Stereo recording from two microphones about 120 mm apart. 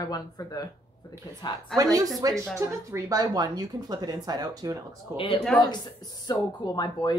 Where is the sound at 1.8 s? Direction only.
30° right (ahead or behind).